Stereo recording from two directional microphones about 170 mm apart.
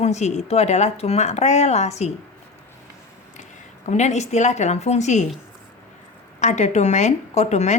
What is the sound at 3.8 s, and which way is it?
A woman's voice, 40° left (ahead or behind).